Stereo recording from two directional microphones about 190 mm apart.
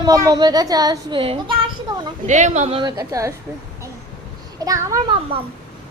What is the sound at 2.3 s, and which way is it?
A woman's voice, 40° right (ahead or behind).